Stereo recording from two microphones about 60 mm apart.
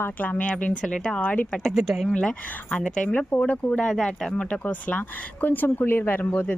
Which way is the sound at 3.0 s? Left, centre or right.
Left.